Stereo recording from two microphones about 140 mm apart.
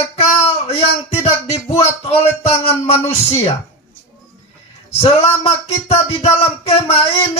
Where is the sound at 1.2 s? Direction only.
45° left (ahead or behind).